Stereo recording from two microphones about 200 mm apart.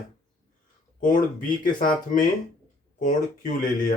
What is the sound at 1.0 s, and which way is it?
Speech, 40° left (ahead or behind).